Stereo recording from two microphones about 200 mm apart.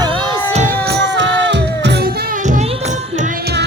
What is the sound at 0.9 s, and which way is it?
Music, 60° right (ahead or behind).